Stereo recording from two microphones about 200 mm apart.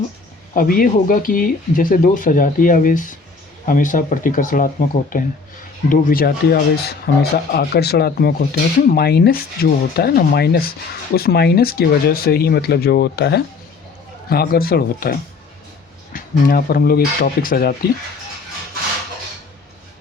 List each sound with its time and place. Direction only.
0.5 s speech: 45° left (ahead or behind)